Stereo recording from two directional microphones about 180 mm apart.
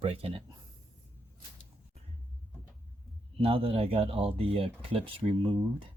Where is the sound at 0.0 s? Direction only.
30° right (ahead or behind).